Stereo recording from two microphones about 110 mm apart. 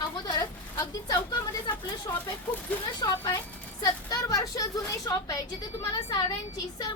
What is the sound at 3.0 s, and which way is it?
A woman's voice, 35° left (ahead or behind).